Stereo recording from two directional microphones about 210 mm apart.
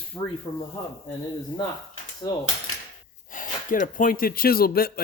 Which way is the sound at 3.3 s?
40° left (ahead or behind).